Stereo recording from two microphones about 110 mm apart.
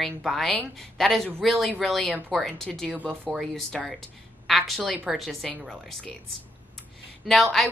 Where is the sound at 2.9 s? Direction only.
15° right (ahead or behind).